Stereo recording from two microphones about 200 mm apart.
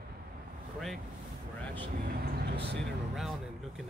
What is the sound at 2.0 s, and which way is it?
Speech, 55° right (ahead or behind).